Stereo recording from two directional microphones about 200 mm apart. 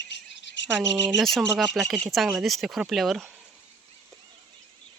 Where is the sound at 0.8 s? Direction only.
Centre (ahead or behind).